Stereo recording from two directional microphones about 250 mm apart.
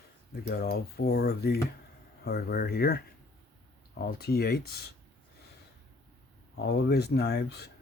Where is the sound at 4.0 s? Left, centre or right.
Left.